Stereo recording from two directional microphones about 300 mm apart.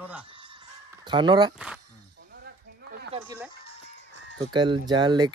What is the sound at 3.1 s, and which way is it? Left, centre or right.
Speech, centre.